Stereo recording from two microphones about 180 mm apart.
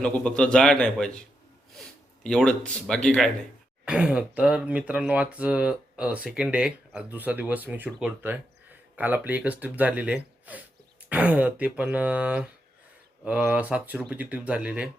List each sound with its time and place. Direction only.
0.0 s a man's voice: 5° left (ahead or behind)
2.2 s a man's voice: 5° left (ahead or behind)